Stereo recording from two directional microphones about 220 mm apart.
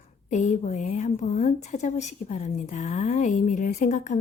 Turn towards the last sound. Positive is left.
turn(degrees=35)  # may be behind; listen again after turning